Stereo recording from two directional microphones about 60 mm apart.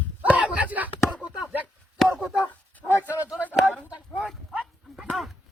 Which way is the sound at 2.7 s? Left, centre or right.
Left.